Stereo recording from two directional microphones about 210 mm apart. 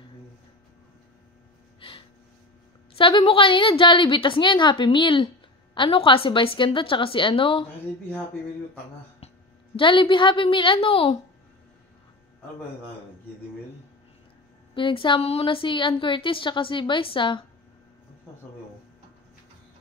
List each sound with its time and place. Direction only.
1.8 s gasp: 25° left (ahead or behind)
3.0 s a woman's voice: 25° left (ahead or behind)
9.8 s a woman's voice: 25° left (ahead or behind)
14.7 s a woman's voice: 25° left (ahead or behind)